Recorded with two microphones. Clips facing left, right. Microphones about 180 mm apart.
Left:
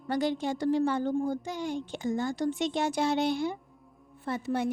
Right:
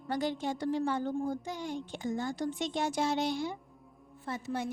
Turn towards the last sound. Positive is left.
turn(degrees=65)  # may be behind; listen again after turning